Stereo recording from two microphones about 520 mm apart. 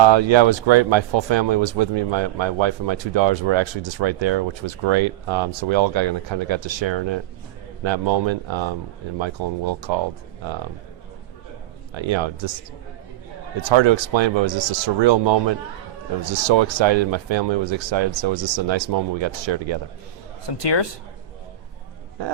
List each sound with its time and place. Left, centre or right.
0.0 s speech: right
11.9 s speech: right
13.6 s speech: right
20.5 s speech: left